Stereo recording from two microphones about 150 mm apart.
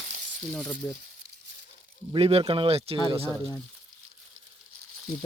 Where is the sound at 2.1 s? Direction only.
40° right (ahead or behind).